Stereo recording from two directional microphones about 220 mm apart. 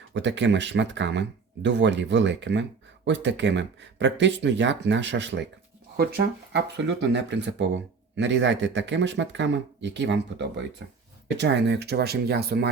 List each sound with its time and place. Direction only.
0.1 s speech: 55° right (ahead or behind)